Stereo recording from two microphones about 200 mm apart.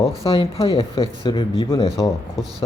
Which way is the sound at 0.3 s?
30° left (ahead or behind).